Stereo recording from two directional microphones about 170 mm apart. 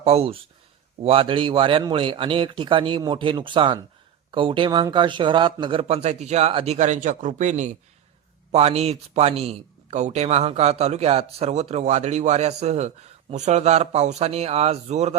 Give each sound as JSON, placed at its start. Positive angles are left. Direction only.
{"t": 0.0, "sound": "a man's voice", "side_deg": -35}